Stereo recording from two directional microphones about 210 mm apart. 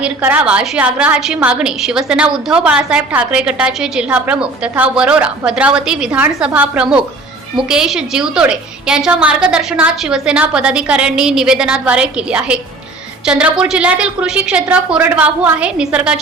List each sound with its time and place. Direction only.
0.0 s a woman's voice: 10° right (ahead or behind)